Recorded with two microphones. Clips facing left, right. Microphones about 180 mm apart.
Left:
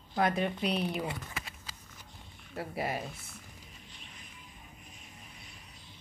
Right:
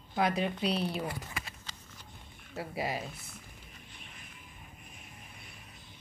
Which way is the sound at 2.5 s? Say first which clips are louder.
Even; 10° right (ahead or behind).